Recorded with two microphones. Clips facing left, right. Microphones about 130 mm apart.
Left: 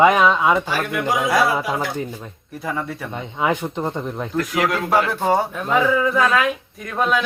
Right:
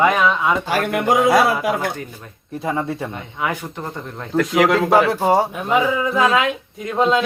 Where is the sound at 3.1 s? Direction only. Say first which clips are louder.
Left 3 dB; 20° left (ahead or behind).